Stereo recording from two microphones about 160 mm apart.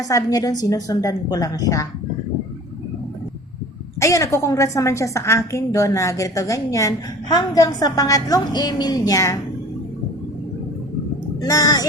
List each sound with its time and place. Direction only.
0.0 s a woman's voice: 20° left (ahead or behind)
4.0 s a woman's voice: 20° left (ahead or behind)
11.4 s a woman's voice: 20° left (ahead or behind)